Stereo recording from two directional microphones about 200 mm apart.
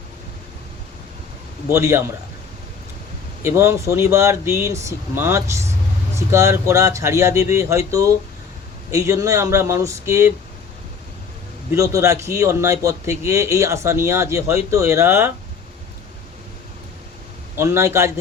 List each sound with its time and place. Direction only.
1.7 s a man's voice: 15° right (ahead or behind)
3.4 s a man's voice: 15° right (ahead or behind)
11.7 s a man's voice: 15° right (ahead or behind)
17.6 s a man's voice: 15° right (ahead or behind)